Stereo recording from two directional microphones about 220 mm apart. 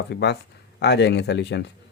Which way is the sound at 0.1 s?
50° left (ahead or behind).